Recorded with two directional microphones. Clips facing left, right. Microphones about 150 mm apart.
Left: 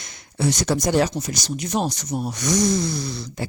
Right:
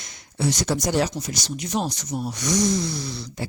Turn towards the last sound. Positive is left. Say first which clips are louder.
# left 3 dB
turn(degrees=45)  # may be behind; listen again after turning